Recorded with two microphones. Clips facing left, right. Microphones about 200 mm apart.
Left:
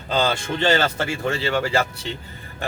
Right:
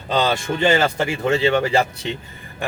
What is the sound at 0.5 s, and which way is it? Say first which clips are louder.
Speech: right 3 dB; 15° right (ahead or behind).